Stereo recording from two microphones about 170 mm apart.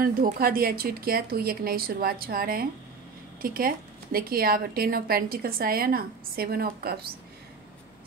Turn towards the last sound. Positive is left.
turn(degrees=-65)  # may be behind; listen again after turning